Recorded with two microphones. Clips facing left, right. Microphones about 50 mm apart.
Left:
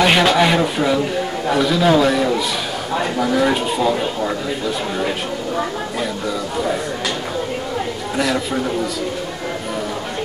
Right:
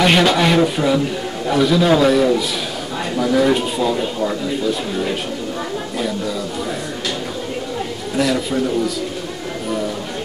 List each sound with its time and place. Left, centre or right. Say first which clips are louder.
0.0 s a man's voice: even; centre
8.2 s a man's voice: right 2 dB; centre